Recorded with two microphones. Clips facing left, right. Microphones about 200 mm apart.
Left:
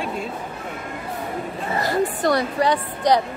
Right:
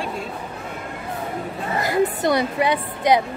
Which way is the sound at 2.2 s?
20° right (ahead or behind).